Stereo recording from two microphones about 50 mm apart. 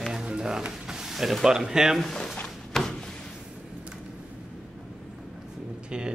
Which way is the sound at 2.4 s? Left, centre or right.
Centre.